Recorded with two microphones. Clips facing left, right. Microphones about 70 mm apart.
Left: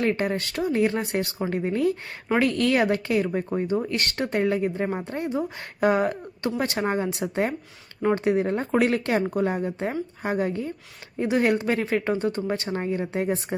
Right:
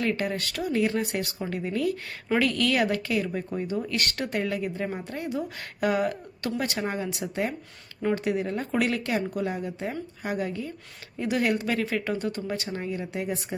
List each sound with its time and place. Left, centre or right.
0.0 s speech: left